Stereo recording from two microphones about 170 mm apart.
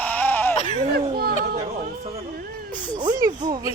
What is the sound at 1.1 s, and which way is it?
Speech, 65° right (ahead or behind).